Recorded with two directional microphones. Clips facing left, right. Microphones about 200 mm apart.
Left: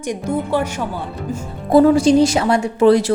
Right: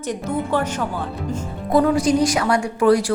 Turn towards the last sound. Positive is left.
turn(degrees=25)  # may be behind; listen again after turning